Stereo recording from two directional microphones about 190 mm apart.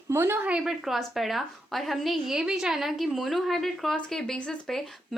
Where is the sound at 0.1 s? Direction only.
10° right (ahead or behind).